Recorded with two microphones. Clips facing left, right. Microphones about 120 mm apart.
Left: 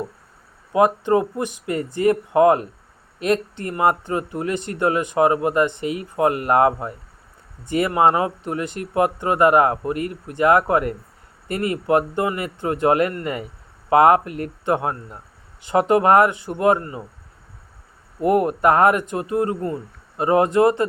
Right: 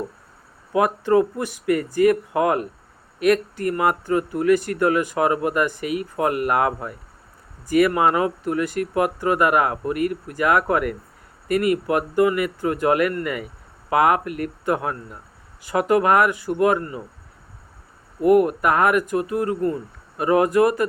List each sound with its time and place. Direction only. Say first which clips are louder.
0.7 s speech: left 1 dB; 20° left (ahead or behind)
18.2 s speech: right 2 dB; 30° left (ahead or behind)